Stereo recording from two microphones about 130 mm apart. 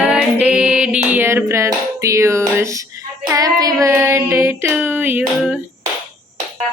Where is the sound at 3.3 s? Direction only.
30° right (ahead or behind).